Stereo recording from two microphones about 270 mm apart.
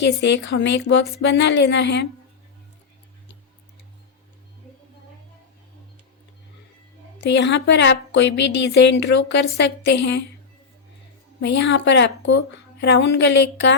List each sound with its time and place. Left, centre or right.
0.0 s a woman's voice: left
7.2 s a woman's voice: left
11.3 s a woman's voice: left